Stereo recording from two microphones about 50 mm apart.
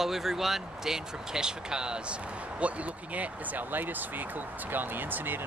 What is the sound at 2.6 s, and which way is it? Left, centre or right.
Speech, right.